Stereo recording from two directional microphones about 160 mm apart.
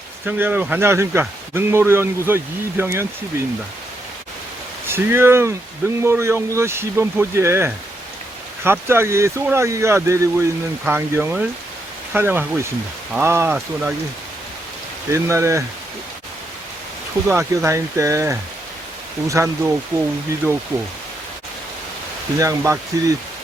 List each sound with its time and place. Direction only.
0.3 s a man's voice: 10° right (ahead or behind)
4.9 s a man's voice: 15° right (ahead or behind)
15.1 s a man's voice: 20° right (ahead or behind)
17.2 s a man's voice: 15° right (ahead or behind)
22.4 s speech: 20° right (ahead or behind)